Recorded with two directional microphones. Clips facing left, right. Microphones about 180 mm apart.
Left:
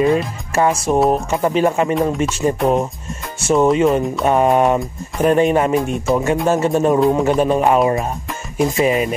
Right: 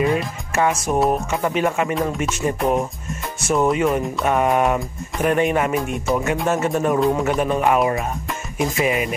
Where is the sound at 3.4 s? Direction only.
25° left (ahead or behind).